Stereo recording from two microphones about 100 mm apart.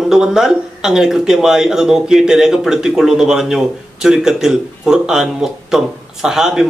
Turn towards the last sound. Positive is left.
turn(degrees=-5)  # may be behind; listen again after turning